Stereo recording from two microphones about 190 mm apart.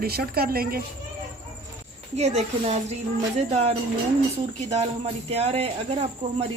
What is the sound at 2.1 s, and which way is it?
Speech, 35° right (ahead or behind).